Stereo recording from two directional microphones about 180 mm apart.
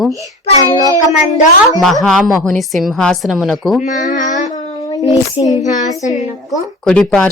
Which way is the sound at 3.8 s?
45° left (ahead or behind).